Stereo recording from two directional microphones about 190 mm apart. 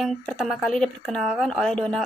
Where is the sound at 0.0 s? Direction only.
Centre (ahead or behind).